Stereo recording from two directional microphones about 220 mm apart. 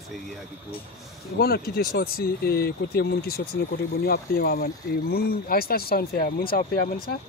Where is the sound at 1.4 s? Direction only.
45° left (ahead or behind).